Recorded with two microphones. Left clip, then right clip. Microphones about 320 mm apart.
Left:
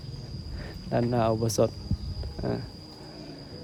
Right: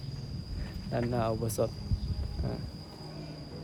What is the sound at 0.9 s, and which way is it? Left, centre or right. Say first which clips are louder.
Speech: left 6 dB; left.